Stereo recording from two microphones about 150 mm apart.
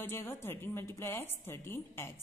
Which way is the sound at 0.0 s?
15° left (ahead or behind).